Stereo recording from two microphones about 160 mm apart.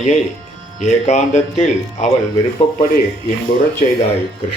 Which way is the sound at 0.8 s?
45° left (ahead or behind).